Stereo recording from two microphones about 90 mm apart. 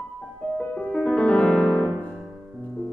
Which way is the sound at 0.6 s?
15° left (ahead or behind).